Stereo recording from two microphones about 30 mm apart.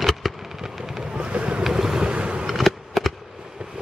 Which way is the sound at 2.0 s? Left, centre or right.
Right.